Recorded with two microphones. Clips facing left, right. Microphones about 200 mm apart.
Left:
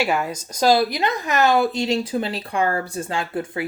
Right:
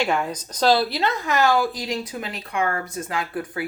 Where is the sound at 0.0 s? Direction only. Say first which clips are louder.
Left 1 dB; 5° left (ahead or behind).